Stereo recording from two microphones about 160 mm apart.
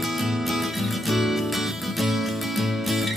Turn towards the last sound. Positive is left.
turn(degrees=0)  # may be behind; listen again after turning